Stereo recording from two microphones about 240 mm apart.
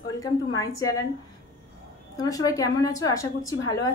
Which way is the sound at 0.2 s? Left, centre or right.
Centre.